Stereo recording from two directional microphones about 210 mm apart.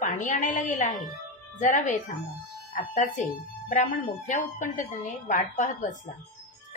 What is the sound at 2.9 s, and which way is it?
A woman's voice, 40° left (ahead or behind).